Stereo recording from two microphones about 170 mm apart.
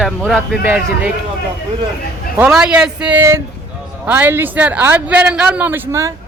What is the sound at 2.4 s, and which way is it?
Speech, 5° right (ahead or behind).